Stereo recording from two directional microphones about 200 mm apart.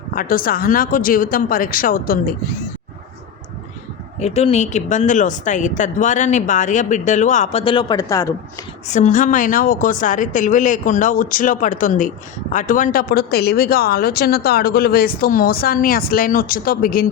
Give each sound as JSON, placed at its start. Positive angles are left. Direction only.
{"t": 0.1, "sound": "speech", "side_deg": 45}
{"t": 4.2, "sound": "speech", "side_deg": 35}
{"t": 8.9, "sound": "speech", "side_deg": 40}